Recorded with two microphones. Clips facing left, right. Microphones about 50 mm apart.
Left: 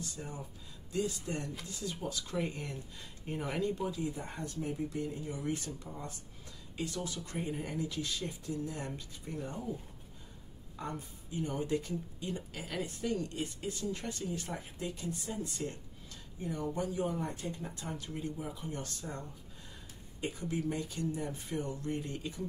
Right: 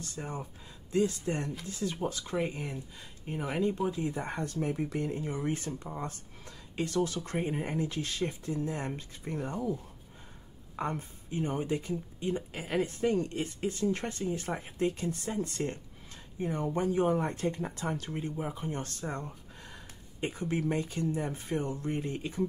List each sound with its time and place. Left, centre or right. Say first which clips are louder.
0.1 s speech: right 5 dB; right
2.2 s speech: right 4 dB; right
4.1 s speech: right 6 dB; right
5.3 s speech: right 4 dB; right
6.7 s speech: right 8 dB; right
9.3 s speech: right 5 dB; right
10.8 s speech: right 6 dB; right
15.0 s speech: right 5 dB; right
16.3 s speech: right 5 dB; right
18.1 s speech: right 4 dB; right